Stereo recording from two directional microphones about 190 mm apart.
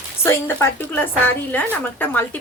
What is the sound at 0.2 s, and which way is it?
A woman's voice, 15° left (ahead or behind).